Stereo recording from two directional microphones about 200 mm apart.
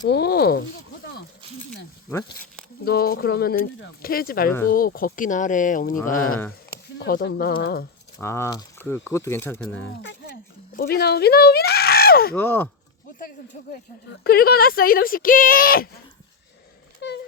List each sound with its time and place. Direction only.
0.1 s speech: 50° left (ahead or behind)
2.0 s speech: 10° left (ahead or behind)
2.8 s speech: 50° left (ahead or behind)
7.0 s speech: 50° left (ahead or behind)
8.2 s speech: 15° left (ahead or behind)
10.8 s speech: 50° left (ahead or behind)
12.3 s speech: 10° left (ahead or behind)
14.1 s speech: 50° left (ahead or behind)
17.0 s a sound: 55° left (ahead or behind)